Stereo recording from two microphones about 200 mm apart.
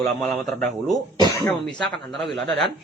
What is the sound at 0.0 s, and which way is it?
Speech, centre (ahead or behind).